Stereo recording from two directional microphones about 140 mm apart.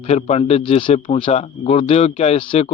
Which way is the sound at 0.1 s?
50° left (ahead or behind).